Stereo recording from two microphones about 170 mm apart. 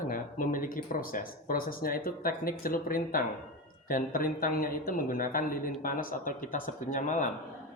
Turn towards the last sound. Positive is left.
turn(degrees=45)  # may be behind; listen again after turning